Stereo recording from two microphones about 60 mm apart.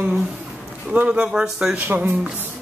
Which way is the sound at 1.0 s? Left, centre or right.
Centre.